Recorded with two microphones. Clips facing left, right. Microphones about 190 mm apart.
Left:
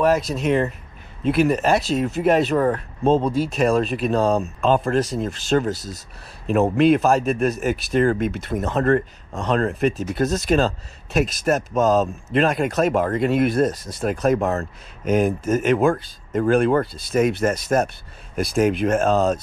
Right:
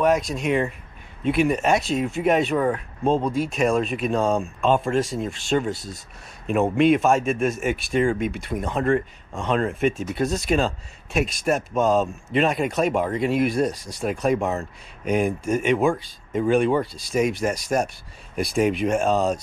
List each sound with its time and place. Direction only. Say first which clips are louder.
0.0 s speech: left 2 dB; centre (ahead or behind)
2.5 s speech: left 3 dB; 40° left (ahead or behind)
3.0 s speech: left 3 dB; 30° left (ahead or behind)
4.4 s speech: left 2 dB; centre (ahead or behind)
8.7 s speech: left 3 dB; 40° left (ahead or behind)
9.3 s speech: left 2 dB; centre (ahead or behind)
17.5 s speech: left 3 dB; 10° right (ahead or behind)
18.3 s speech: left 2 dB; centre (ahead or behind)